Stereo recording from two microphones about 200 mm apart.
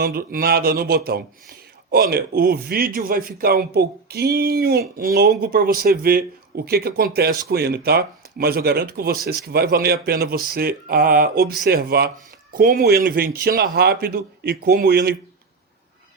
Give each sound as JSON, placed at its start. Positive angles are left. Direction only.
{"t": 0.0, "sound": "a man's voice", "side_deg": -50}